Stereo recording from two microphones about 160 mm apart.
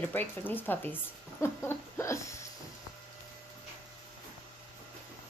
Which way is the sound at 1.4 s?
15° left (ahead or behind).